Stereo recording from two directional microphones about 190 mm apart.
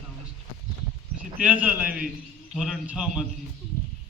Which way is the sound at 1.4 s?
10° right (ahead or behind).